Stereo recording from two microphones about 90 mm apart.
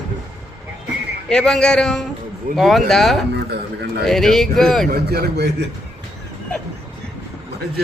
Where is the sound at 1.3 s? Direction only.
5° left (ahead or behind).